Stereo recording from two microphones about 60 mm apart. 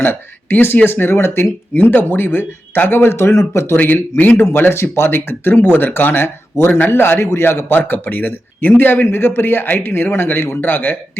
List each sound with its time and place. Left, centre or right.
0.0 s speech: left
3.8 s speech: left
4.4 s speech: left
6.7 s speech: left